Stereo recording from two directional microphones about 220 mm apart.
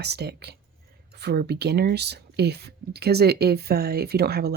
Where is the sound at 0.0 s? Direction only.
50° right (ahead or behind).